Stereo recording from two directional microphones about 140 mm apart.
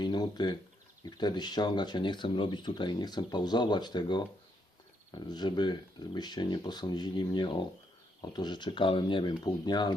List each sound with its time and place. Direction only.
0.0 s speech: 30° left (ahead or behind)